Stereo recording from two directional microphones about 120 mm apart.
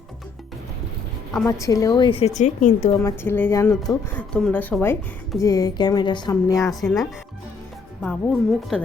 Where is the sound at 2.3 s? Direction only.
85° left.